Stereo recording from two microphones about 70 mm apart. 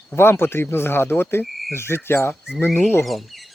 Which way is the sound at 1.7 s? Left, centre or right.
Left.